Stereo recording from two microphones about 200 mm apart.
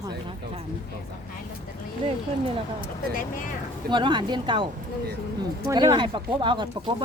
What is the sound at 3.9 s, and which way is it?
Speech, 20° right (ahead or behind).